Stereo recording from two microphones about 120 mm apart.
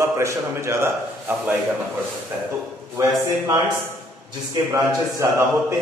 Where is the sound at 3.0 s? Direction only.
25° right (ahead or behind).